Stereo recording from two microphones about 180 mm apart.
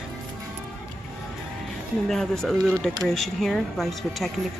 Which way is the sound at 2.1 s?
Centre (ahead or behind).